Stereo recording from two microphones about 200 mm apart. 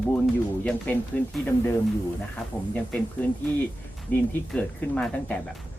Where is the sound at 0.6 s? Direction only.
5° left (ahead or behind).